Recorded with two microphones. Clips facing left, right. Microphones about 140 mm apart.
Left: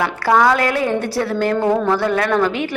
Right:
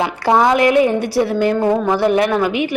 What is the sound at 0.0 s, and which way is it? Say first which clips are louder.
A woman's voice: right 1 dB; 20° right (ahead or behind).